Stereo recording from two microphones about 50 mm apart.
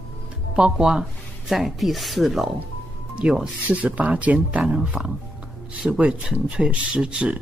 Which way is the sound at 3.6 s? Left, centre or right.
Right.